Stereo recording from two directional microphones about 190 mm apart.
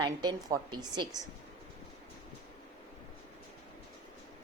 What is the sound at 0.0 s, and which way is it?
A woman's voice, 20° right (ahead or behind).